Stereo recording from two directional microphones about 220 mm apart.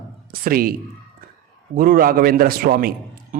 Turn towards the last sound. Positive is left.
turn(degrees=-40)  # may be behind; listen again after turning